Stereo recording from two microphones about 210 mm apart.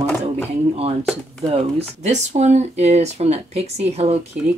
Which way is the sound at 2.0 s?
35° right (ahead or behind).